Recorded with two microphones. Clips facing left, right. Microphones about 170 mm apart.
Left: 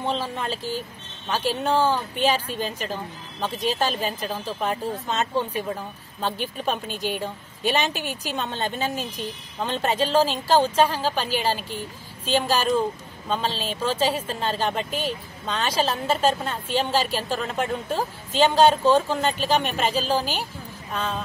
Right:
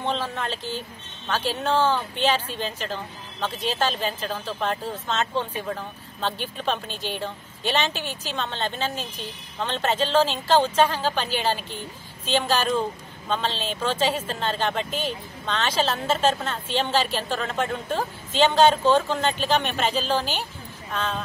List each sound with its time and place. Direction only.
0.0 s a woman's voice: 5° left (ahead or behind)